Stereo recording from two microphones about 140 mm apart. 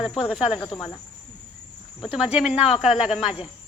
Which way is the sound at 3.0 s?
5° right (ahead or behind).